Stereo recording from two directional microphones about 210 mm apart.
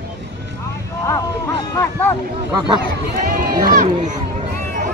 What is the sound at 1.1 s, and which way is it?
Speech, 15° left (ahead or behind).